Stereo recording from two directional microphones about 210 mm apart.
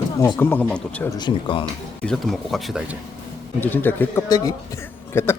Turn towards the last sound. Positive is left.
turn(degrees=10)  # may be behind; listen again after turning